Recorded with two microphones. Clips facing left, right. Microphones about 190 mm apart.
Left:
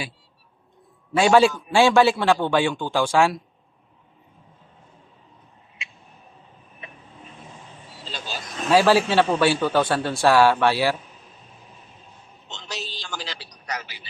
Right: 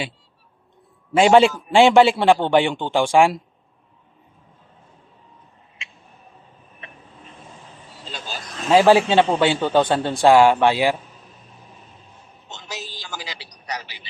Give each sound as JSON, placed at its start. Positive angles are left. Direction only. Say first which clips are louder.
{"t": 1.1, "sound": "a man's voice", "louder": "right 3 dB", "side_deg": -20}
{"t": 8.7, "sound": "a man's voice", "louder": "right 3 dB", "side_deg": -20}
{"t": 13.0, "sound": "a man's voice", "louder": "even", "side_deg": -5}